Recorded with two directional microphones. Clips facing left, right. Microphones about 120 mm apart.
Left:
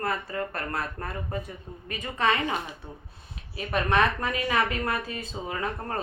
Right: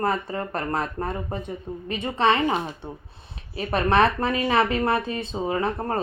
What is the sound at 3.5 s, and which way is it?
Speech, 35° right (ahead or behind).